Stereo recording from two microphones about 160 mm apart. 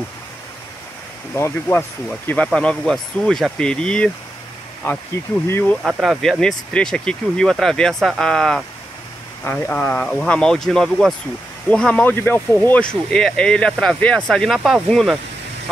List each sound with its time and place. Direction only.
1.3 s speech: 15° left (ahead or behind)
5.5 s speech: 10° left (ahead or behind)
5.9 s speech: 5° right (ahead or behind)